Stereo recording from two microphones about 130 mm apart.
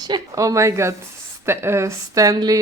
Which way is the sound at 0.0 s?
30° right (ahead or behind).